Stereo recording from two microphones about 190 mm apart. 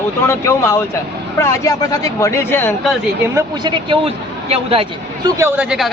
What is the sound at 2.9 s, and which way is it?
Speech, 10° right (ahead or behind).